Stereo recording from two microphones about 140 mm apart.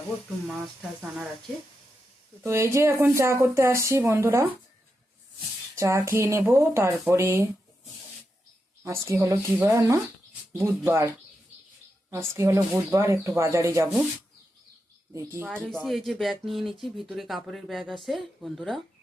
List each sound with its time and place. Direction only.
0.4 s speech: centre (ahead or behind)
2.4 s speech: 15° right (ahead or behind)
5.7 s speech: 20° right (ahead or behind)
8.8 s speech: 20° right (ahead or behind)
12.1 s speech: 20° right (ahead or behind)
15.1 s speech: 20° right (ahead or behind)
15.7 s speech: centre (ahead or behind)